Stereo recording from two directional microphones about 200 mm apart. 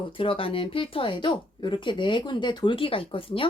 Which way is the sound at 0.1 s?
25° left (ahead or behind).